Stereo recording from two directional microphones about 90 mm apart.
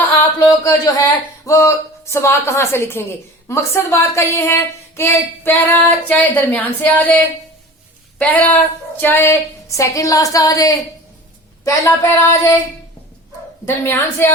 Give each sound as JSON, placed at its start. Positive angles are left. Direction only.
{"t": 0.6, "sound": "a woman's voice", "side_deg": 40}
{"t": 8.2, "sound": "a woman's voice", "side_deg": 15}
{"t": 11.9, "sound": "a woman's voice", "side_deg": 25}
{"t": 13.7, "sound": "a woman's voice", "side_deg": 25}